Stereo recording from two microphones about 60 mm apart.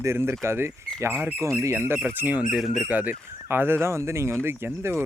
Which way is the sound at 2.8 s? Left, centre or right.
Right.